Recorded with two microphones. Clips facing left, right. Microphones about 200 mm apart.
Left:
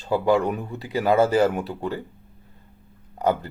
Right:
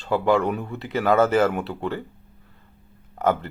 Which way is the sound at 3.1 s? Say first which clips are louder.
Even; 15° left (ahead or behind).